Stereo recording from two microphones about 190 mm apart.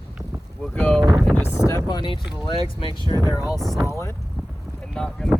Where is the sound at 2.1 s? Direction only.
Centre (ahead or behind).